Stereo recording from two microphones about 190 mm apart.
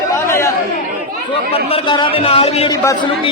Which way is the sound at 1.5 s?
30° left (ahead or behind).